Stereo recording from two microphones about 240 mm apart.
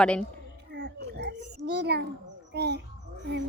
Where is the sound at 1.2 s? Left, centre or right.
Right.